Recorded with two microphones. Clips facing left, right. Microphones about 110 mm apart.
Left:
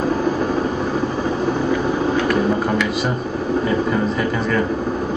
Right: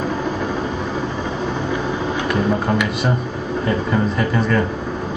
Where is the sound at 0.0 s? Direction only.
40° left (ahead or behind).